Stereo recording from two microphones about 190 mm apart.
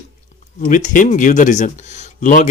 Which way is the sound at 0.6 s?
45° left (ahead or behind).